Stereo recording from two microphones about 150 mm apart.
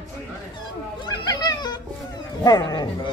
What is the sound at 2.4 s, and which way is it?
Speech, 25° left (ahead or behind).